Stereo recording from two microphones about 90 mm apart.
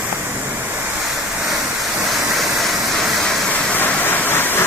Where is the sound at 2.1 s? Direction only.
Centre (ahead or behind).